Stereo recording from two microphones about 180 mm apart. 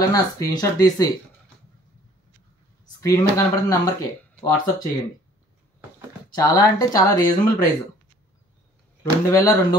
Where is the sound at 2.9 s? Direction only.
15° left (ahead or behind).